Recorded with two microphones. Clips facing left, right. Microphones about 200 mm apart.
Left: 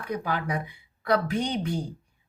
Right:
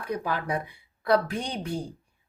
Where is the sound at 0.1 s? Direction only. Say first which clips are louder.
Even; 35° right (ahead or behind).